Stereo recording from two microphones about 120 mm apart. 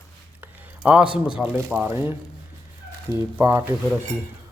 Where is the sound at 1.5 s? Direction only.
20° right (ahead or behind).